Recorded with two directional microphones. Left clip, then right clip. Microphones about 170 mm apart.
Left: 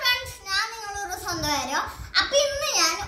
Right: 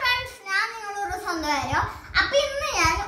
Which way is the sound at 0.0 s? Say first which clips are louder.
Even; 5° right (ahead or behind).